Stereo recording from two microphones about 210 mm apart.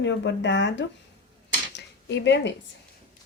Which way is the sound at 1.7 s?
55° left (ahead or behind).